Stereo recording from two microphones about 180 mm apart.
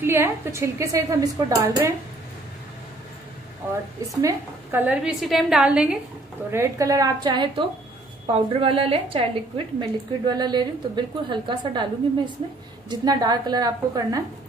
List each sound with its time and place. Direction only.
0.0 s a woman's voice: 15° right (ahead or behind)
3.6 s a woman's voice: 10° right (ahead or behind)
6.5 s a woman's voice: 15° right (ahead or behind)
12.9 s a woman's voice: 20° right (ahead or behind)